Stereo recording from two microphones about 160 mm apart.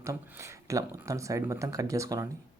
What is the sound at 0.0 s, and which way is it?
Speech, 20° right (ahead or behind).